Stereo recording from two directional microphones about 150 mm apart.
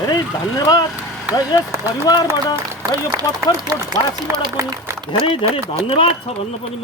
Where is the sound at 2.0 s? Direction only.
20° left (ahead or behind).